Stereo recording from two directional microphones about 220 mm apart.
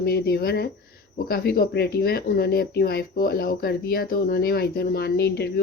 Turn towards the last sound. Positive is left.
turn(degrees=45)  # may be behind; listen again after turning